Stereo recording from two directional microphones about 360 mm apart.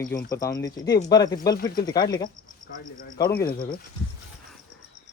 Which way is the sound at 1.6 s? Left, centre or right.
Left.